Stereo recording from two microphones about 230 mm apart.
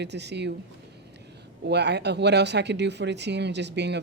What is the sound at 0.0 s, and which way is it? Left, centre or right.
Speech, right.